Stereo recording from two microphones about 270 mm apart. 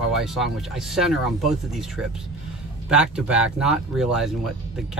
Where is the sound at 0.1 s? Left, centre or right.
Centre.